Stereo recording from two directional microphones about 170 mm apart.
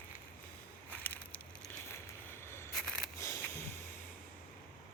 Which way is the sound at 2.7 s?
5° left (ahead or behind).